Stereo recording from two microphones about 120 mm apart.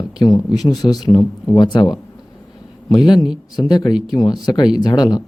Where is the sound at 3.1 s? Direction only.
5° right (ahead or behind).